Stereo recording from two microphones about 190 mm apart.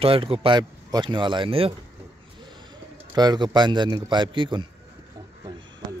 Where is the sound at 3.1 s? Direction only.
20° right (ahead or behind).